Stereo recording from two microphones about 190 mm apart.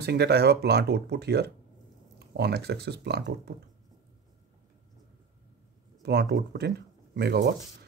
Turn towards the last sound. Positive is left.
turn(degrees=-60)  # may be behind; listen again after turning